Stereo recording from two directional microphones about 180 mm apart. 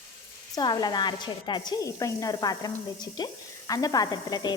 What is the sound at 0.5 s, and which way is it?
Speech, 20° left (ahead or behind).